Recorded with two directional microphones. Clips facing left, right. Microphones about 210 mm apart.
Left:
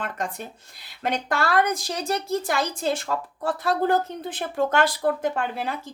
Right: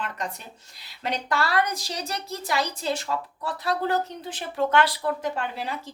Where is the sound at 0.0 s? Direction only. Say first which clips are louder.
Left 3 dB; 50° left (ahead or behind).